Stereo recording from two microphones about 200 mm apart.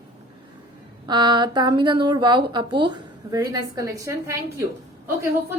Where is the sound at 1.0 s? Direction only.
20° right (ahead or behind).